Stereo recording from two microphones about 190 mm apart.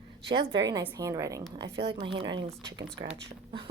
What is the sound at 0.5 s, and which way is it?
Speech, 20° right (ahead or behind).